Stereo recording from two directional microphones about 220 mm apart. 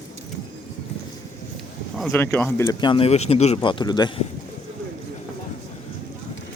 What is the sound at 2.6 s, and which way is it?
A man's voice, 20° left (ahead or behind).